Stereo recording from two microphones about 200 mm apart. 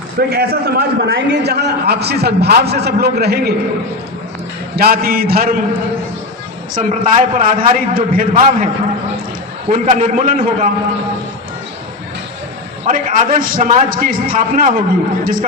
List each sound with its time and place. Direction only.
0.3 s a man's voice: 50° right (ahead or behind)
4.8 s a man's voice: 50° right (ahead or behind)
6.7 s a man's voice: 40° right (ahead or behind)
12.8 s a man's voice: 40° right (ahead or behind)